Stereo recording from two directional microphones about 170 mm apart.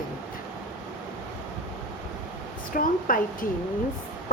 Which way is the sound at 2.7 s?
55° left (ahead or behind).